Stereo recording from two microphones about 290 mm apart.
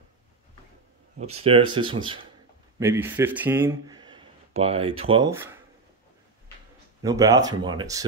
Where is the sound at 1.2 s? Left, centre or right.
Right.